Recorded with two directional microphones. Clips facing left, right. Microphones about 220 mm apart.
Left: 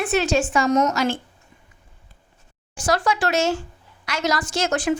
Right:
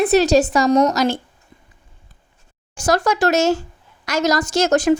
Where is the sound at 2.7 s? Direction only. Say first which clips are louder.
Right 4 dB; 40° right (ahead or behind).